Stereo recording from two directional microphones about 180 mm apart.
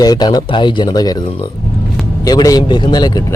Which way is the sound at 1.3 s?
30° left (ahead or behind).